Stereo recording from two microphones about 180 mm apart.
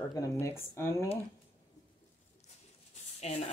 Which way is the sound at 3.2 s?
35° left (ahead or behind).